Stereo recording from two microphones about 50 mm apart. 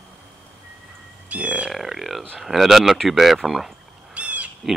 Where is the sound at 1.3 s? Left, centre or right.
Right.